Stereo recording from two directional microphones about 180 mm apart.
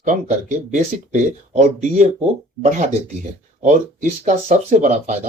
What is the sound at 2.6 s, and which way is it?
Speech, 40° right (ahead or behind).